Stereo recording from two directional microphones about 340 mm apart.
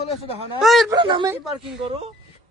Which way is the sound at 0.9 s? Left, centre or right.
Centre.